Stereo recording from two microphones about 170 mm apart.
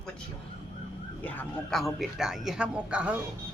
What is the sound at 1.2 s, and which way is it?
A man's voice, 5° left (ahead or behind).